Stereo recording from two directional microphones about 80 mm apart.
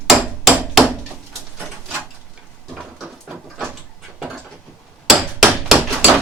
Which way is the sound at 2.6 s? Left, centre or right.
Centre.